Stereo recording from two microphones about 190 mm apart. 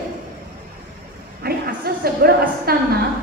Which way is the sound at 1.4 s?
55° right (ahead or behind).